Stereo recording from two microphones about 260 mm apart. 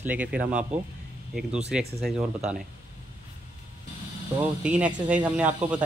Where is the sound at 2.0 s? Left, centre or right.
Centre.